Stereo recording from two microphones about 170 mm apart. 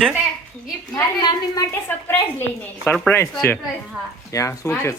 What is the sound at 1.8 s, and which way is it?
A woman's voice, 10° left (ahead or behind).